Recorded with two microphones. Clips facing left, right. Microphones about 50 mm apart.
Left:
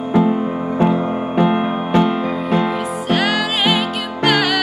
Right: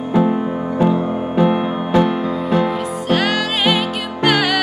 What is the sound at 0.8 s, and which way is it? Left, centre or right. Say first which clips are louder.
Music: right 1 dB; left.